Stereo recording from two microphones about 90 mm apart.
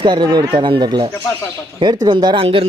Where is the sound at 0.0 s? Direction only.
55° right (ahead or behind).